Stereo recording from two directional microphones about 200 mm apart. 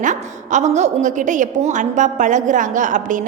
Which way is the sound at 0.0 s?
35° right (ahead or behind).